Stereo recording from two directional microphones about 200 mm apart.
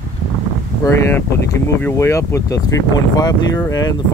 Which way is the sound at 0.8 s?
10° left (ahead or behind).